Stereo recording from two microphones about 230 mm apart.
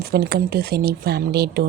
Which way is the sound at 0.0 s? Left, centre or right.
Right.